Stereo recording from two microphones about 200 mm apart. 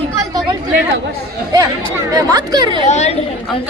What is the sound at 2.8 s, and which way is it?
Speech, 35° left (ahead or behind).